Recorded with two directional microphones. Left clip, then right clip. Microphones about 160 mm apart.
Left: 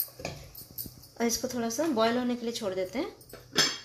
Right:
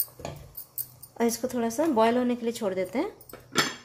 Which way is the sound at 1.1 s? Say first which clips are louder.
Right 3 dB; 30° right (ahead or behind).